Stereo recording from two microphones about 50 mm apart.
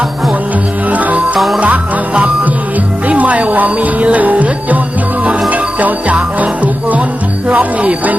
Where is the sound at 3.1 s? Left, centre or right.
Right.